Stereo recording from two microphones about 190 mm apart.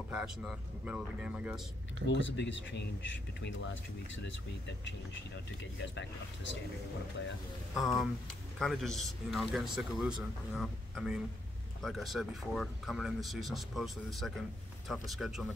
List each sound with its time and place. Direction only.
0.1 s a man's voice: 5° right (ahead or behind)
2.0 s speech: 75° left (ahead or behind)
7.7 s a man's voice: centre (ahead or behind)